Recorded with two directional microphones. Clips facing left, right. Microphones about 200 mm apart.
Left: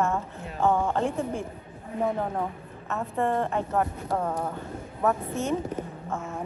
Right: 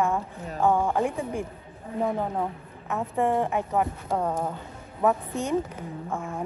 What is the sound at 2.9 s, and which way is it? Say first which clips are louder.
A woman's voice: right 2 dB; 15° right (ahead or behind).